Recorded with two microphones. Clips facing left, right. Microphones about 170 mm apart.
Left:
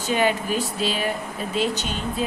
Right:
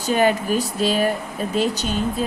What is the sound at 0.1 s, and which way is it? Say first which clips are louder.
A woman's voice: right 4 dB; 45° right (ahead or behind).